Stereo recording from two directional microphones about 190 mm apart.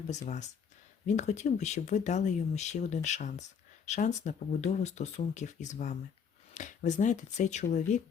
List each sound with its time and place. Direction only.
0.3 s speech: 40° left (ahead or behind)